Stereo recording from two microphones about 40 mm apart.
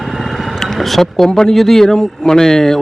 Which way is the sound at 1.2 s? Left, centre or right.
Centre.